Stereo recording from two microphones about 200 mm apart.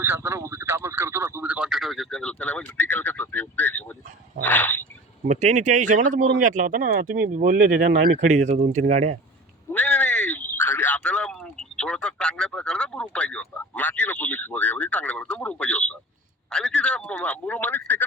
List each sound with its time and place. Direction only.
0.0 s speech: 15° right (ahead or behind); by 4.8 s 10° left (ahead or behind)
5.3 s speech: 35° right (ahead or behind)
9.7 s speech: 5° left (ahead or behind)